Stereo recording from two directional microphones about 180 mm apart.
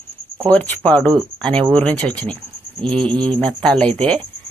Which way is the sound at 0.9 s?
5° left (ahead or behind).